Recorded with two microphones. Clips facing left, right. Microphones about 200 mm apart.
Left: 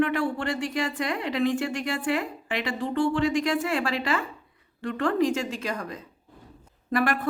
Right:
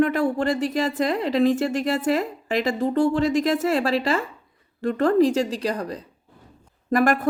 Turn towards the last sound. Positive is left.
turn(degrees=-45)  # may be behind; listen again after turning